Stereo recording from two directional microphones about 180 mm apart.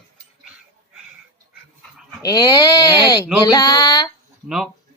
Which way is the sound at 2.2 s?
20° left (ahead or behind).